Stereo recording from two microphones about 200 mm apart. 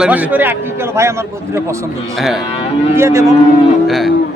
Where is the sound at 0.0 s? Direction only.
5° right (ahead or behind).